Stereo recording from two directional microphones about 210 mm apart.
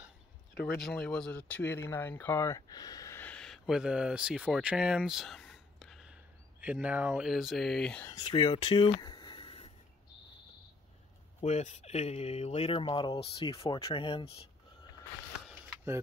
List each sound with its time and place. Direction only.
0.7 s speech: centre (ahead or behind)
8.1 s speech: 20° left (ahead or behind)
11.4 s speech: 35° left (ahead or behind)